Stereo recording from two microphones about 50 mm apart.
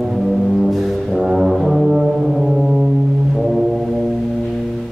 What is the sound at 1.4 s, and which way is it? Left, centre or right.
Brass instrument, centre.